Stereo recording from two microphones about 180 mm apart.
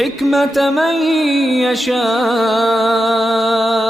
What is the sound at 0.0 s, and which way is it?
Music, centre (ahead or behind).